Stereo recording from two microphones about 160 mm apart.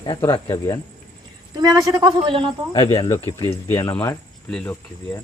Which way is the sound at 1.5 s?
25° right (ahead or behind).